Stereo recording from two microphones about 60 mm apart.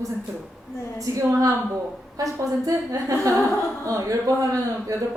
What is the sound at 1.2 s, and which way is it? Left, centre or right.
Speech, right.